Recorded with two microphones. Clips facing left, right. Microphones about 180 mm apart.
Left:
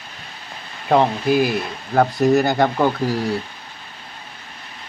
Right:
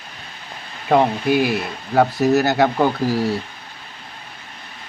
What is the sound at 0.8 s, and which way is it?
Speech, centre (ahead or behind).